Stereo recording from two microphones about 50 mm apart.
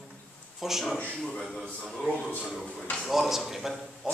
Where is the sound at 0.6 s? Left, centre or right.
Centre.